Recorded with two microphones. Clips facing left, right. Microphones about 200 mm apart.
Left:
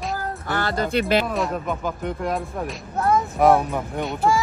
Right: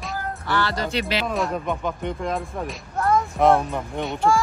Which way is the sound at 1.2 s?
Centre (ahead or behind).